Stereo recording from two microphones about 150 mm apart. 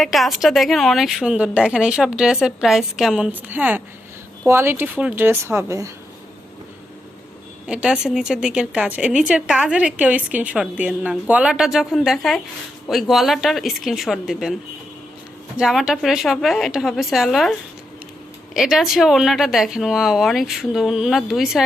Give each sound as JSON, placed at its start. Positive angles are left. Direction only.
{"t": 0.0, "sound": "a woman's voice", "side_deg": 0}
{"t": 7.7, "sound": "a woman's voice", "side_deg": -5}
{"t": 15.5, "sound": "a woman's voice", "side_deg": -5}